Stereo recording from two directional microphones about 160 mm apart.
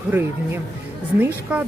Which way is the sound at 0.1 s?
15° right (ahead or behind).